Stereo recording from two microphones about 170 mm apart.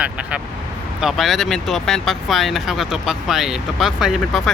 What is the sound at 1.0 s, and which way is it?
Speech, centre (ahead or behind).